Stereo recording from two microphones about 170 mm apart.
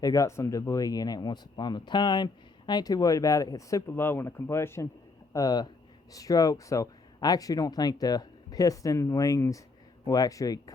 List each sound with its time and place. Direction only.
0.0 s speech: 20° left (ahead or behind)